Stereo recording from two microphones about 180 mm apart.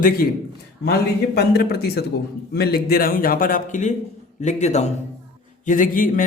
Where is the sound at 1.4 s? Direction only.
60° left (ahead or behind).